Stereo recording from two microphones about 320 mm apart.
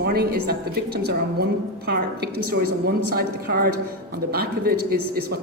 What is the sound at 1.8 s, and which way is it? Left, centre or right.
Speech, right.